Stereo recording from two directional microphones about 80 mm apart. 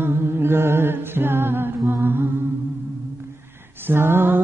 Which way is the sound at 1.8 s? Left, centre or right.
Right.